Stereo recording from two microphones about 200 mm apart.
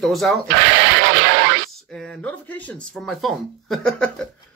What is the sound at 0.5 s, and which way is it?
Radio, 70° right (ahead or behind).